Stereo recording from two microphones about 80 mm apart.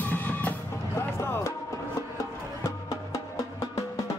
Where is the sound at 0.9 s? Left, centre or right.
Left.